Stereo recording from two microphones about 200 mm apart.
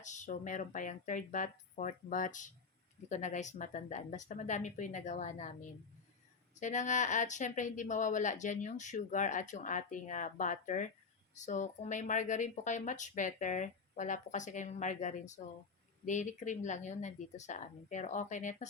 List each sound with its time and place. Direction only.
0.0 s speech: 35° left (ahead or behind)